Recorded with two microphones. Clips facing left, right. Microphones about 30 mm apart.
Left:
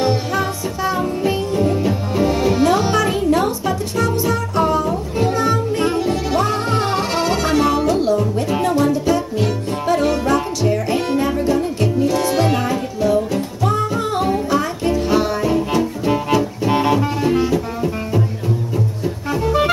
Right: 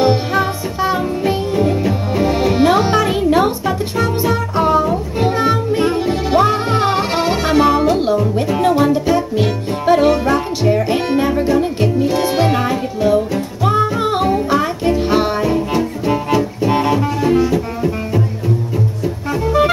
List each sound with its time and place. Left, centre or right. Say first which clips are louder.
0.0 s music: right 4 dB; right
15.4 s music: right 1 dB; centre